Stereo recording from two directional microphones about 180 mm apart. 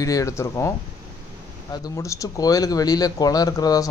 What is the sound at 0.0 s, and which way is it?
Speech, 20° left (ahead or behind).